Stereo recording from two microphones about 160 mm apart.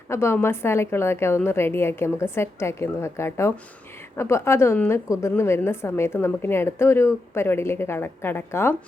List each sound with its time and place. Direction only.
0.1 s a woman's voice: 15° left (ahead or behind)